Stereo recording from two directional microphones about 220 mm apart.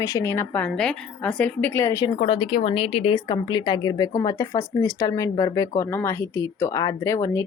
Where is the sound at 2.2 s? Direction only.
25° left (ahead or behind).